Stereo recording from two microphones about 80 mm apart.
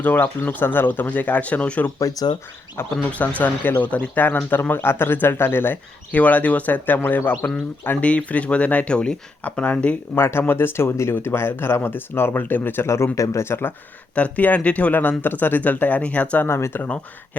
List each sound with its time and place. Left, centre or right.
0.0 s speech: left
2.0 s speech: left
2.9 s speech: centre
10.2 s speech: left
12.9 s speech: left
14.2 s speech: centre
16.5 s speech: left